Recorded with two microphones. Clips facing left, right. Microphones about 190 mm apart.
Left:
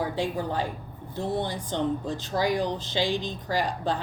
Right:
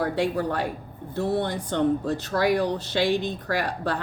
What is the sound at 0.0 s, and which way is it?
Speech, 70° right (ahead or behind).